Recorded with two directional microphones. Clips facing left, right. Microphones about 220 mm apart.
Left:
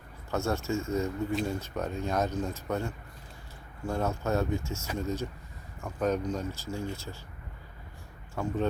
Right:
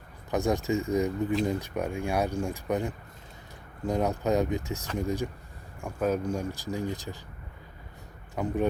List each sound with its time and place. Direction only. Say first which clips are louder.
0.3 s speech: right 4 dB; 15° right (ahead or behind)
8.4 s speech: right 2 dB; 15° right (ahead or behind)